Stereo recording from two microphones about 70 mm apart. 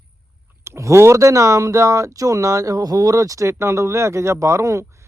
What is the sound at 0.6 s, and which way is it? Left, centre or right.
Speech, right.